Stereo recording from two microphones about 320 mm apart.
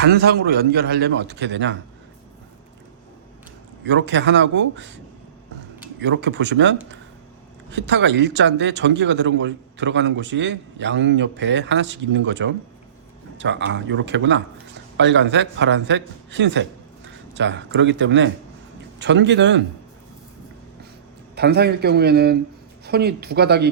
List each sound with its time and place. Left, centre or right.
0.0 s speech: right
3.8 s speech: right
6.0 s speech: right
21.3 s speech: right